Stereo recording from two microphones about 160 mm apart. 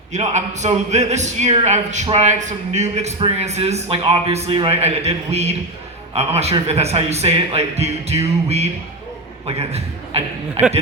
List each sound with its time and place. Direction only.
0.1 s a man's voice: 45° right (ahead or behind)